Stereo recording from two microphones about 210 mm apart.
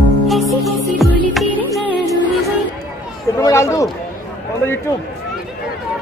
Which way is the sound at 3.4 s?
15° left (ahead or behind).